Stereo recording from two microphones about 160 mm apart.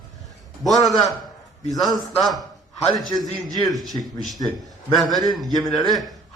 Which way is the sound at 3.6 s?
Centre (ahead or behind).